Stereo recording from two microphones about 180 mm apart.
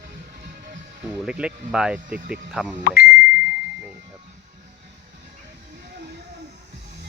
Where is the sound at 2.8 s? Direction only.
55° left (ahead or behind).